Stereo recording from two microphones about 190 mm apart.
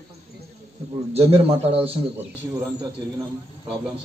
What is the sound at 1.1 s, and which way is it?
Speech, 30° right (ahead or behind).